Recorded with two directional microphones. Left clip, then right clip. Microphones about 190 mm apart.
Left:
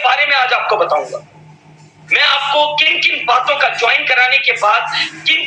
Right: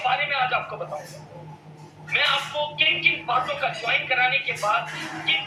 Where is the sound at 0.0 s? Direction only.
50° left (ahead or behind).